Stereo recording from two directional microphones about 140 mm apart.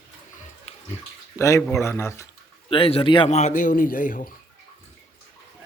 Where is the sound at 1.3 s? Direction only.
20° left (ahead or behind).